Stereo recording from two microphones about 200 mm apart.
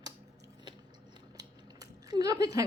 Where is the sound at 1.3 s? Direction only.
20° right (ahead or behind).